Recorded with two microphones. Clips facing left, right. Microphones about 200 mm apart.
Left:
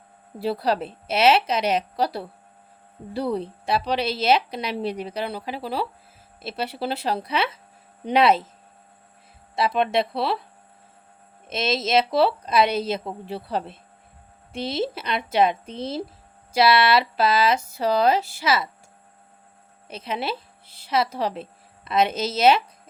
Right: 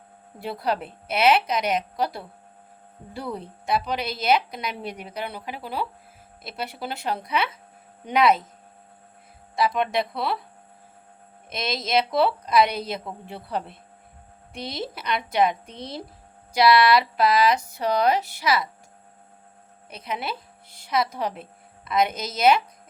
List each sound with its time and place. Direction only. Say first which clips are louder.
0.3 s a woman's voice: left 4 dB; 35° left (ahead or behind)
9.6 s a woman's voice: left 2 dB; 25° left (ahead or behind)
11.4 s a woman's voice: left 5 dB; 25° left (ahead or behind)
19.9 s a woman's voice: left 3 dB; 25° left (ahead or behind)